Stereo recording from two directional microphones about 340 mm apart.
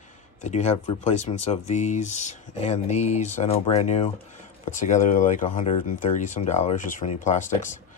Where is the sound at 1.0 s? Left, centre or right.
Centre.